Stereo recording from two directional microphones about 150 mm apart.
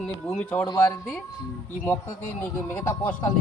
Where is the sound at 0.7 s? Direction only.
25° left (ahead or behind).